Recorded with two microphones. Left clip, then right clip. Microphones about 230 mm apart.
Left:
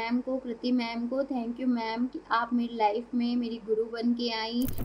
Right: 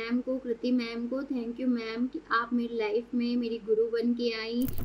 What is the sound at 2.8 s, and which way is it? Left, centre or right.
A woman's voice, centre.